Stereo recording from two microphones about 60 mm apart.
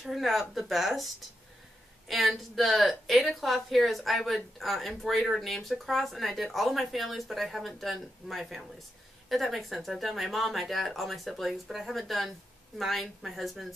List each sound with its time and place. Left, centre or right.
0.0 s a woman's voice: centre